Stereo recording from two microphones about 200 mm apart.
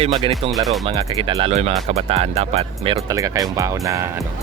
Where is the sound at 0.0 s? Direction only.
30° right (ahead or behind).